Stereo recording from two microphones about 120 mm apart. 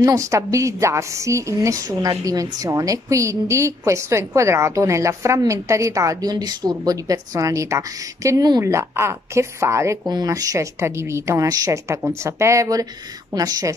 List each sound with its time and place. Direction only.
0.0 s a woman's voice: 25° right (ahead or behind)